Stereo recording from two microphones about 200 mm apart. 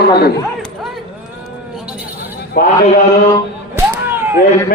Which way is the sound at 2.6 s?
50° left (ahead or behind).